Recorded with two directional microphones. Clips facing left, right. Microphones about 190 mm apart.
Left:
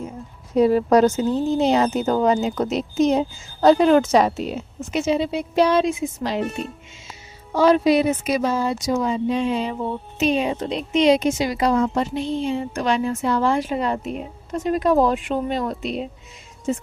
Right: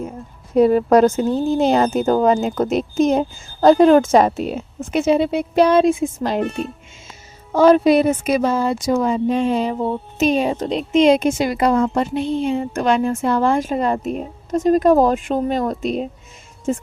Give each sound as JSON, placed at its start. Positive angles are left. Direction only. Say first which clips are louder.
{"t": 0.5, "sound": "speech", "louder": "right 3 dB", "side_deg": -50}
{"t": 7.5, "sound": "speech", "louder": "right 4 dB", "side_deg": -50}